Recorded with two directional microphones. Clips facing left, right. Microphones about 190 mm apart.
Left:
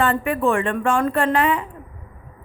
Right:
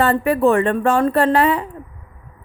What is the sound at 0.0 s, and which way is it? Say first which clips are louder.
Speech: right 4 dB; 35° right (ahead or behind).